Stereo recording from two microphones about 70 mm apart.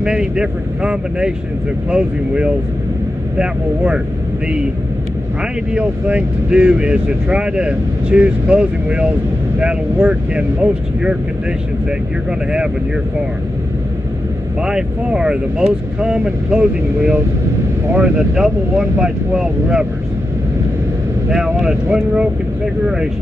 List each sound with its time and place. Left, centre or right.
0.0 s speech: centre
5.8 s speech: centre
14.6 s speech: centre
21.5 s speech: centre